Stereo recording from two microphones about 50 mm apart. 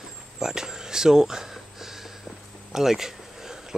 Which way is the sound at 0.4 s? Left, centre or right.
Centre.